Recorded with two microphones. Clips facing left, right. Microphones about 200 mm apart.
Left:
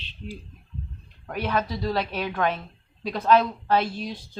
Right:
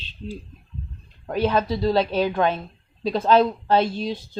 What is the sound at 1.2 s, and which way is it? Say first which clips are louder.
A woman's voice: right 6 dB; 25° right (ahead or behind).